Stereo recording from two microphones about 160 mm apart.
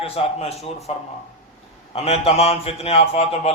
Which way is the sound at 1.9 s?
40° left (ahead or behind).